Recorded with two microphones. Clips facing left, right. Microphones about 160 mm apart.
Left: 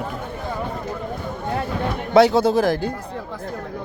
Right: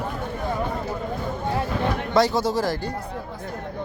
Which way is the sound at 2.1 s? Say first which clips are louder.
Left 7 dB; 65° left (ahead or behind).